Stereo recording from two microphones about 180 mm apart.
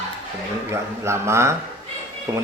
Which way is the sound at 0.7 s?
15° right (ahead or behind).